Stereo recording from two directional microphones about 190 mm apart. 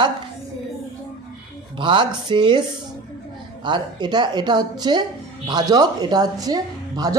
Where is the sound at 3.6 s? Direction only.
25° right (ahead or behind).